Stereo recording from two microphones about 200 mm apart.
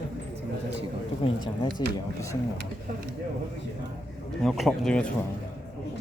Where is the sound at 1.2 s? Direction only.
25° left (ahead or behind).